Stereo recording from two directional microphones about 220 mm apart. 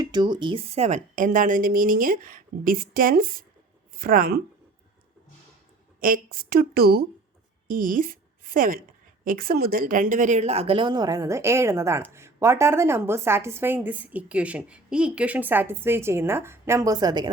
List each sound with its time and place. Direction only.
0.0 s a woman's voice: 20° right (ahead or behind); by 4.4 s 40° right (ahead or behind)
6.0 s a woman's voice: 40° right (ahead or behind); by 17.3 s 20° right (ahead or behind)